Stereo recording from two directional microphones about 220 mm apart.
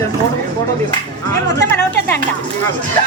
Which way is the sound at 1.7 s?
10° left (ahead or behind).